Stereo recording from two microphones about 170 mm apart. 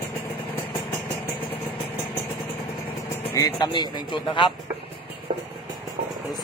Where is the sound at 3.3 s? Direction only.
20° left (ahead or behind).